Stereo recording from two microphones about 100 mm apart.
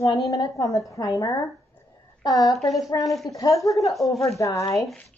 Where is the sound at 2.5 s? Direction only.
Centre (ahead or behind).